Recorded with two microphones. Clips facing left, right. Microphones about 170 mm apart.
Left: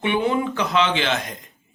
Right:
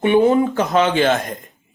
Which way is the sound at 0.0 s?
40° right (ahead or behind).